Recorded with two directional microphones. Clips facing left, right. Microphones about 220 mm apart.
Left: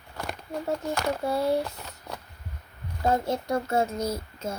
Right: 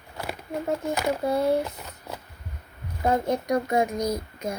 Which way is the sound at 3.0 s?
15° right (ahead or behind).